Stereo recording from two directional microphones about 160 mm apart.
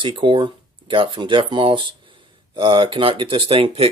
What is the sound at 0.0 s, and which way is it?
Keys jangling, 30° right (ahead or behind).